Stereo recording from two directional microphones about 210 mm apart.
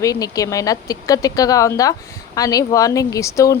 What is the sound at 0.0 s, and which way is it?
Speech, 15° left (ahead or behind).